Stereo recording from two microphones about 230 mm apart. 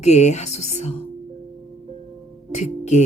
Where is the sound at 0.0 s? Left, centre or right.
Left.